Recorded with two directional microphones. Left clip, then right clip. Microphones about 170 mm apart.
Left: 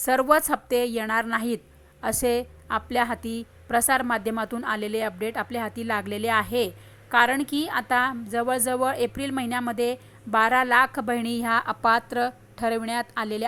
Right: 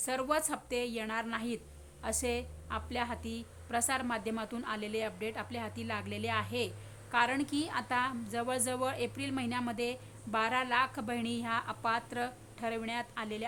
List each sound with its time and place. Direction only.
0.0 s a woman's voice: 35° left (ahead or behind)